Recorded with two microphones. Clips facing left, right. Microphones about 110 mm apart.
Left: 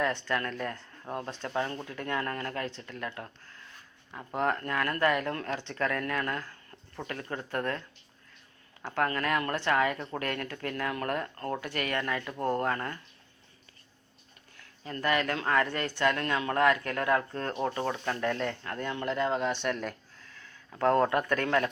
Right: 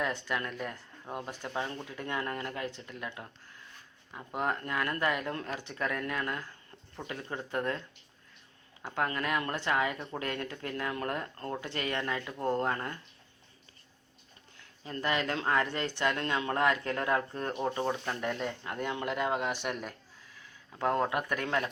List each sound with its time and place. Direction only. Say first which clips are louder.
0.3 s speech: left 3 dB; 15° right (ahead or behind)
4.4 s speech: left 3 dB; 20° right (ahead or behind)
8.8 s speech: left 3 dB; 15° right (ahead or behind)
11.3 s speech: left 3 dB; 40° left (ahead or behind)
11.6 s speech: even; 25° right (ahead or behind)
14.6 s speech: left 2 dB; 20° right (ahead or behind)